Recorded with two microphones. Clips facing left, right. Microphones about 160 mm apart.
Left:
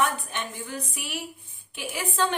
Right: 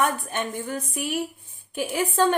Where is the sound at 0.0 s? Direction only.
45° right (ahead or behind).